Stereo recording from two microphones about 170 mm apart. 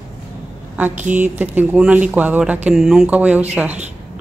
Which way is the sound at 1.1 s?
5° right (ahead or behind).